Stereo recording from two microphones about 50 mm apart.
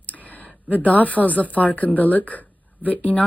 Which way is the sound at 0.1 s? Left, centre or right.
Left.